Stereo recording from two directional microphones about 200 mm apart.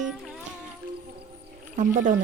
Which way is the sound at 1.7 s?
40° right (ahead or behind).